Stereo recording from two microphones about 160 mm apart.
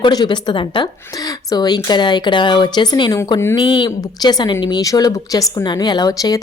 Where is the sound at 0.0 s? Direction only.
25° left (ahead or behind).